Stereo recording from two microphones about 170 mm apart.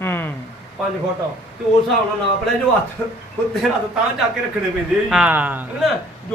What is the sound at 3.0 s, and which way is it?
Speech, 15° left (ahead or behind).